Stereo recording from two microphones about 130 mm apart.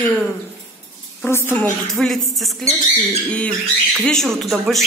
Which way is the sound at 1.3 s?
15° left (ahead or behind).